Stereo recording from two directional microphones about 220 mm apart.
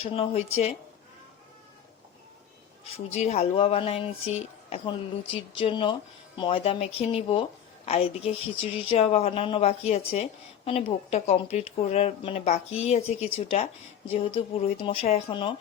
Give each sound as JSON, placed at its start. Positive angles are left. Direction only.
{"t": 0.0, "sound": "speech", "side_deg": 25}
{"t": 3.2, "sound": "speech", "side_deg": 30}